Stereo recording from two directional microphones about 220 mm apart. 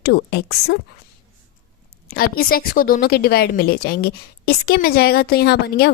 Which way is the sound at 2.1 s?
45° left (ahead or behind).